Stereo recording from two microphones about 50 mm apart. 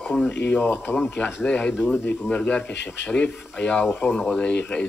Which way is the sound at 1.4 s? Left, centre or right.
Centre.